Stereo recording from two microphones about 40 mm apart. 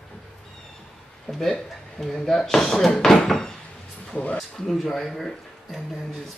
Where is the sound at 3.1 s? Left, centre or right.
Centre.